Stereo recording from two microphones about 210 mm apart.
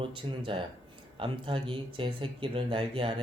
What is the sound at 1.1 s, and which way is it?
Speech, 25° right (ahead or behind).